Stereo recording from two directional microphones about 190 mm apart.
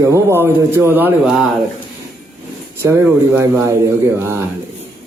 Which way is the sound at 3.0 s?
15° right (ahead or behind).